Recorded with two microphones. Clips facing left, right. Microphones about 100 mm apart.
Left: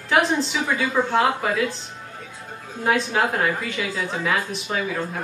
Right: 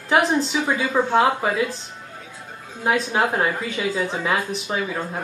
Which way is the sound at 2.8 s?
20° right (ahead or behind).